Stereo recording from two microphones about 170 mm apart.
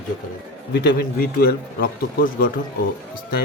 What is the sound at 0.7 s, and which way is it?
A man's voice, 60° left (ahead or behind).